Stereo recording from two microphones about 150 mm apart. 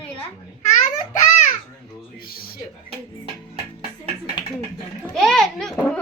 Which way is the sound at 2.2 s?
80° left.